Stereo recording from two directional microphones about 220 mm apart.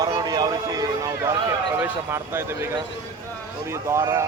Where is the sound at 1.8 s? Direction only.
10° right (ahead or behind).